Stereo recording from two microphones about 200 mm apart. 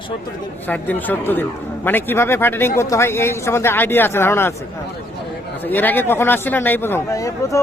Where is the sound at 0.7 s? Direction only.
10° left (ahead or behind).